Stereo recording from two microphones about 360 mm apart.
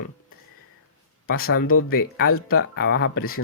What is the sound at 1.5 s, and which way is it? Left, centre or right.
Speech, left.